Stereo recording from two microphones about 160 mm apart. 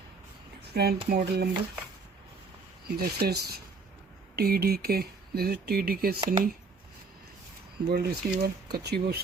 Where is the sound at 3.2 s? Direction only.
85° right.